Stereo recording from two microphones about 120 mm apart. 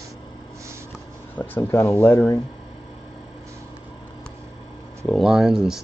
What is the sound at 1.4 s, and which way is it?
Speech, 20° left (ahead or behind).